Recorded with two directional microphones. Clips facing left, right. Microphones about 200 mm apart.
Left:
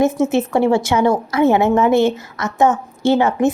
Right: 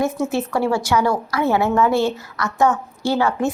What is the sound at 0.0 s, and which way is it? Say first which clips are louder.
A woman's voice: left 5 dB; 20° left (ahead or behind).